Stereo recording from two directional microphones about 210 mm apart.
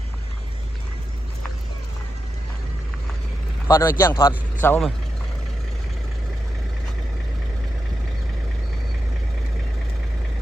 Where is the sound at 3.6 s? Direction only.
15° left (ahead or behind).